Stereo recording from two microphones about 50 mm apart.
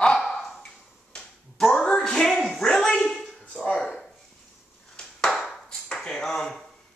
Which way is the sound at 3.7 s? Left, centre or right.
Centre.